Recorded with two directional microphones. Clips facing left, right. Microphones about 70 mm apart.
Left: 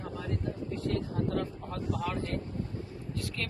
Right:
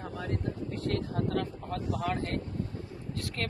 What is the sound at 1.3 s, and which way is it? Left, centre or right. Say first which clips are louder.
Speech: right 1 dB; right.